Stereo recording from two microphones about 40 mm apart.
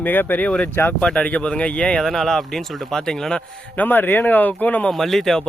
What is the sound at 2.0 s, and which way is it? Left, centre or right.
Speech, centre.